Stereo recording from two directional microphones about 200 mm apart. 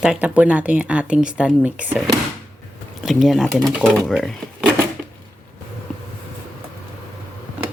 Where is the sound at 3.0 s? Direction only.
Centre (ahead or behind).